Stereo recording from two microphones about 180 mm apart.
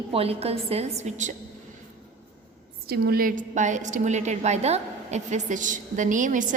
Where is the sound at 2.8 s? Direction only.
60° right (ahead or behind).